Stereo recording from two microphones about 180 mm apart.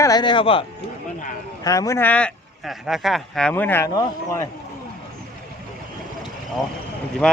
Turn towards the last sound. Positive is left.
turn(degrees=5)  # may be behind; listen again after turning